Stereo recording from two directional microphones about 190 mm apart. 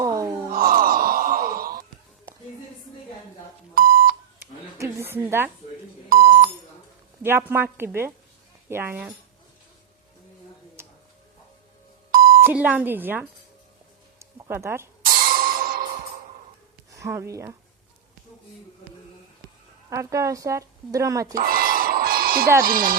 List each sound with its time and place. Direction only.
0.0 s groan: 20° right (ahead or behind)
0.5 s wail: 50° right (ahead or behind)
3.8 s beep: 50° right (ahead or behind)
4.8 s a sound: 15° right (ahead or behind)
6.1 s beep: 50° right (ahead or behind)
7.2 s speech: 10° right (ahead or behind)
12.1 s beep: 50° right (ahead or behind)
12.4 s speech: 10° right (ahead or behind)
14.2 s a sound: 15° right (ahead or behind)
15.0 s music: 50° right (ahead or behind)
16.9 s speech: 15° right (ahead or behind)
19.9 s speech: 15° right (ahead or behind)
21.3 s a sound: 50° right (ahead or behind)
22.6 s speech: 50° right (ahead or behind)